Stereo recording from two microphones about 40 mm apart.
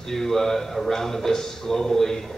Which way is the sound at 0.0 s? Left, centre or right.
Centre.